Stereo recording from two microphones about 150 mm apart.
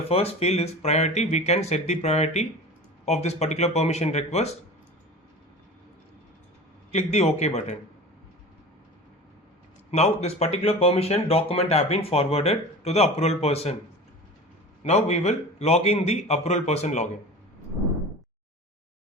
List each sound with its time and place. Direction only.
0.1 s speech: 40° left (ahead or behind)
6.9 s speech: 45° left (ahead or behind)
9.9 s speech: 45° left (ahead or behind)
14.8 s speech: 45° left (ahead or behind)